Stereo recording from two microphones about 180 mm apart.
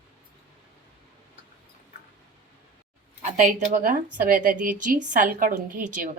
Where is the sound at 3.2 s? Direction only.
40° right (ahead or behind).